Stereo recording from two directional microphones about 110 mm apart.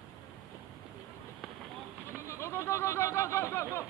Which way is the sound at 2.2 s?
25° left (ahead or behind).